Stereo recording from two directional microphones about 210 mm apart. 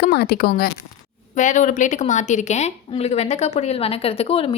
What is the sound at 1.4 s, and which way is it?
A woman's voice, 35° left (ahead or behind).